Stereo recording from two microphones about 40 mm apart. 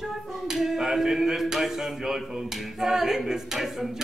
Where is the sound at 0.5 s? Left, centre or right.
Centre.